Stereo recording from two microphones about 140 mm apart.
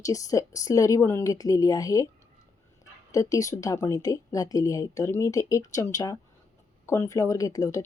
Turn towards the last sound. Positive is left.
turn(degrees=25)  # may be behind; listen again after turning